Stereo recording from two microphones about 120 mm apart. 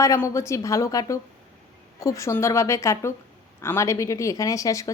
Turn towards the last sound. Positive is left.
turn(degrees=25)  # may be behind; listen again after turning